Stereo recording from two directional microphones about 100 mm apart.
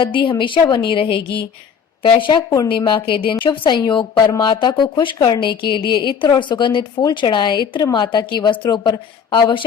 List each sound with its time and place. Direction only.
0.0 s a woman's voice: 60° left (ahead or behind)